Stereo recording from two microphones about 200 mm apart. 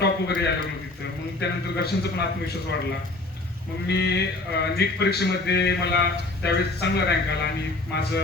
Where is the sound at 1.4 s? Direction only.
55° left (ahead or behind).